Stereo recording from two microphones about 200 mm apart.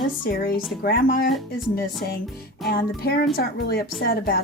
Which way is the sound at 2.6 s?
50° left (ahead or behind).